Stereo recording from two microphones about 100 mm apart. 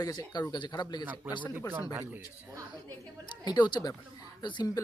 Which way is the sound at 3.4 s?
45° left (ahead or behind).